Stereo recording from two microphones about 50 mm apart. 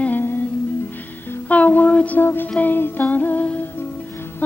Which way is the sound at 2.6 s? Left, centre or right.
Left.